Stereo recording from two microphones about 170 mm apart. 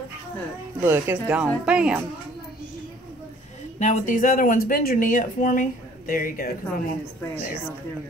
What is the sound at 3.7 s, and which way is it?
Speech, 50° left (ahead or behind).